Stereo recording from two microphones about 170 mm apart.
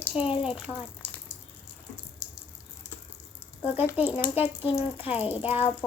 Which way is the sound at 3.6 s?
10° right (ahead or behind).